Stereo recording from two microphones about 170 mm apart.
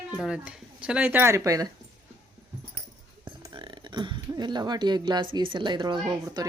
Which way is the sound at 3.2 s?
30° right (ahead or behind).